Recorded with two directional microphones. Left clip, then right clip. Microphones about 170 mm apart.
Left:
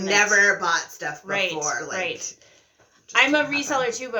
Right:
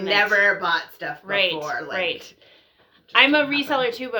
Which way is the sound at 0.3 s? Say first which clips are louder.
Even; 10° left (ahead or behind).